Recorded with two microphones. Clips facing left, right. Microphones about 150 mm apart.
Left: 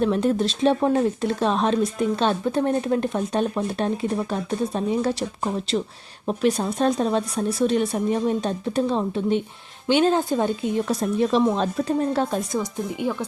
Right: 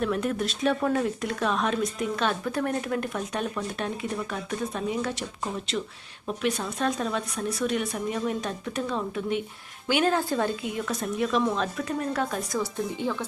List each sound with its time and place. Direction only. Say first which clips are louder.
0.0 s speech: left 6 dB; 30° left (ahead or behind)
13.0 s speech: left 5 dB; 15° left (ahead or behind)